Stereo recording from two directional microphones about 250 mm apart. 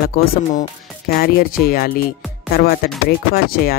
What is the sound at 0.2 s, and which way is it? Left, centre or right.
Speech, left.